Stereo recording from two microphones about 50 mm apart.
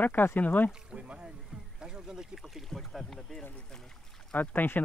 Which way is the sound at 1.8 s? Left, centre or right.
Centre.